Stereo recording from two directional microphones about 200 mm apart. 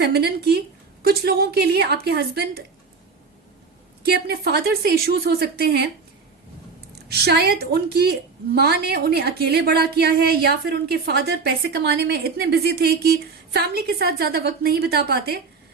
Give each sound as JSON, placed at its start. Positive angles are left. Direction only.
{"t": 0.0, "sound": "a woman's voice", "side_deg": -55}
{"t": 4.0, "sound": "a woman's voice", "side_deg": -55}
{"t": 6.9, "sound": "a woman's voice", "side_deg": -50}